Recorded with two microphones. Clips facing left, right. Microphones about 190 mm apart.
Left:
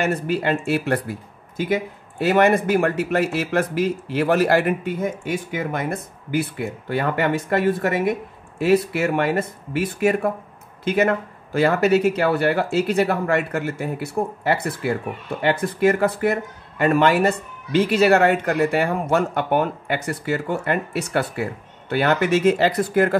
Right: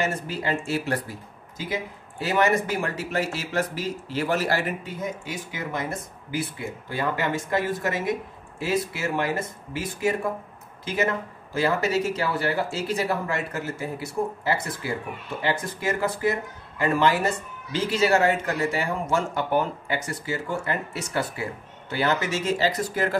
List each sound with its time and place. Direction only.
0.0 s a man's voice: 60° left (ahead or behind)